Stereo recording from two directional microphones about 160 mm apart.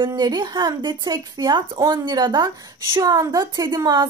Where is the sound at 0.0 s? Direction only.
25° right (ahead or behind).